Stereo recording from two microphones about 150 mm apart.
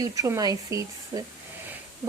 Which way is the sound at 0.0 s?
20° right (ahead or behind).